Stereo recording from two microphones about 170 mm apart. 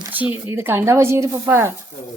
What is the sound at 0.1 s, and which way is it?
Speech, 10° right (ahead or behind).